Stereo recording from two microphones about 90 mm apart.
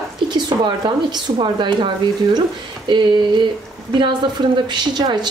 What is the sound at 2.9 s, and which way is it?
Speech, 60° right (ahead or behind).